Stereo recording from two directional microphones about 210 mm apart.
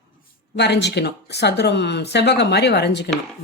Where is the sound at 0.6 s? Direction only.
55° left (ahead or behind).